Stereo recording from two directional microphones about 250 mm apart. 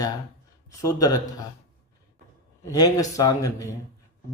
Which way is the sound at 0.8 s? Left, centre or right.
Centre.